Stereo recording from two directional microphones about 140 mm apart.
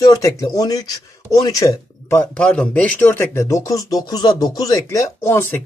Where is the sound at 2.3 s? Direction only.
5° left (ahead or behind).